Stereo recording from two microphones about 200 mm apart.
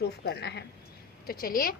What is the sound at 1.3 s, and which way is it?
Speech, 45° left (ahead or behind).